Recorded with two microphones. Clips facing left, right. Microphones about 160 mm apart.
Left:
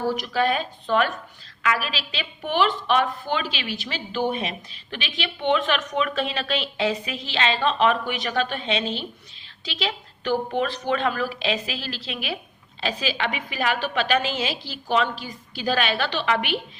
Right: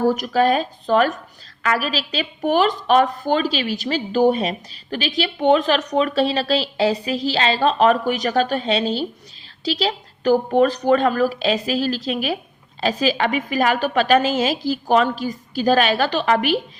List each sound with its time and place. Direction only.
0.0 s a woman's voice: 45° right (ahead or behind)